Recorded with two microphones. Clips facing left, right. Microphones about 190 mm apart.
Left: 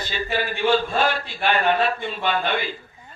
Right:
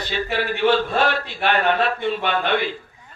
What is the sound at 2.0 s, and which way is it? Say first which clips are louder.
Speech: right 2 dB; 65° right (ahead or behind).